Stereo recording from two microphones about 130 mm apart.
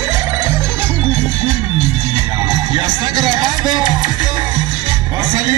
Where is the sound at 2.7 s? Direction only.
35° right (ahead or behind).